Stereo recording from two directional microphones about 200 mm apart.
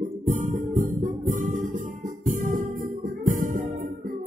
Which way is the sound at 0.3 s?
40° right (ahead or behind).